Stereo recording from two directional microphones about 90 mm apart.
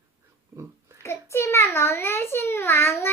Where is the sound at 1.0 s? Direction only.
30° left (ahead or behind).